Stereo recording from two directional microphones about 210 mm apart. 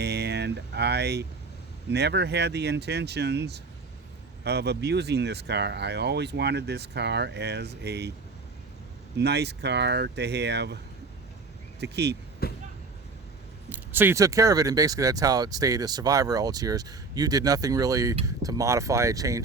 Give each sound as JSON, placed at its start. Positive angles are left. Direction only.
{"t": 0.0, "sound": "a sound", "side_deg": -50}
{"t": 1.9, "sound": "speech", "side_deg": -55}
{"t": 9.1, "sound": "speech", "side_deg": -50}
{"t": 11.8, "sound": "speech", "side_deg": -50}
{"t": 12.4, "sound": "vehicle", "side_deg": 45}
{"t": 13.7, "sound": "speech", "side_deg": -10}